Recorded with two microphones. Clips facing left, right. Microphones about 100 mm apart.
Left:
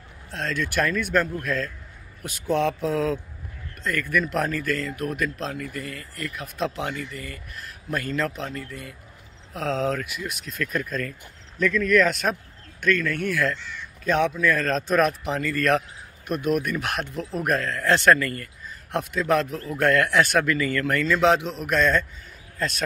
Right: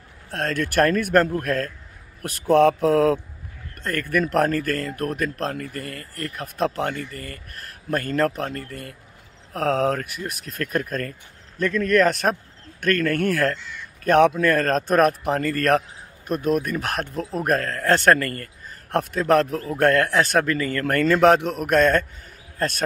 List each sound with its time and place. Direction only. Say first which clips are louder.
0.3 s speech: right 3 dB; 50° right (ahead or behind)
3.8 s speech: right 2 dB; 45° right (ahead or behind)
12.8 s speech: right 3 dB; 55° right (ahead or behind)